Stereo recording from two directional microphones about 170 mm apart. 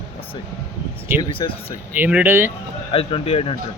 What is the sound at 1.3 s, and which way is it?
Speech, 30° left (ahead or behind).